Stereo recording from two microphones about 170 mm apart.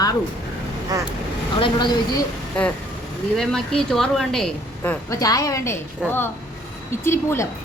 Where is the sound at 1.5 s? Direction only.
30° left (ahead or behind).